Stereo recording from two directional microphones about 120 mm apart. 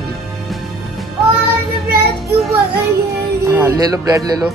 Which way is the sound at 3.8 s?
30° right (ahead or behind).